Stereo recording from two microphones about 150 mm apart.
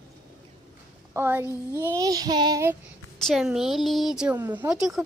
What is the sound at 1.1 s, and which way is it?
A child's voice, 15° right (ahead or behind).